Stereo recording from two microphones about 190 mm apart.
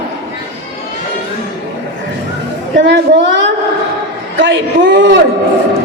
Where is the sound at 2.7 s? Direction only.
70° right (ahead or behind).